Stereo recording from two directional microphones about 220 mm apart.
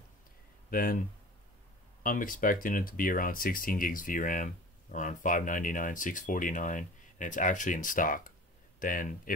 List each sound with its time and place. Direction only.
0.7 s speech: 40° left (ahead or behind)
2.0 s speech: 40° left (ahead or behind)